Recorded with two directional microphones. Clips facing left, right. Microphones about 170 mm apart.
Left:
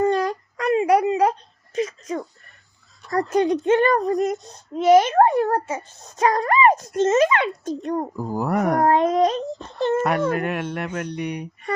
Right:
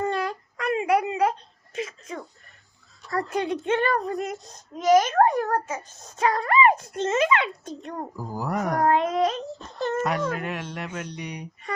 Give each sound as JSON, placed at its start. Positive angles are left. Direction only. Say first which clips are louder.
{"t": 0.0, "sound": "a sound", "louder": "left 7 dB", "side_deg": 40}
{"t": 3.1, "sound": "a child's voice", "louder": "left 7 dB", "side_deg": 40}
{"t": 4.8, "sound": "a child's voice", "louder": "left 4 dB", "side_deg": 30}
{"t": 8.3, "sound": "speech", "louder": "left 6 dB", "side_deg": 60}
{"t": 8.8, "sound": "a child's voice", "louder": "left 3 dB", "side_deg": 35}
{"t": 10.0, "sound": "speech", "louder": "left 5 dB", "side_deg": 60}